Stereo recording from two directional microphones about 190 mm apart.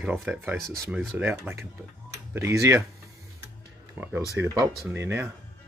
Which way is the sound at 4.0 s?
10° right (ahead or behind).